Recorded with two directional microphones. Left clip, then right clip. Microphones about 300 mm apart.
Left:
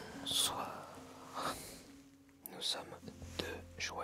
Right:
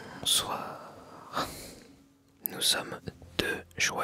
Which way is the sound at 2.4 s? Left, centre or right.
Right.